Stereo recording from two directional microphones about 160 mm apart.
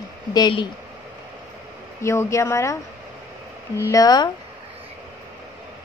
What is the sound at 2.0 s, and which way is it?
A child's voice, 15° left (ahead or behind).